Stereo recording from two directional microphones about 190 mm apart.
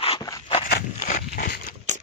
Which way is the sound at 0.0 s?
30° left (ahead or behind).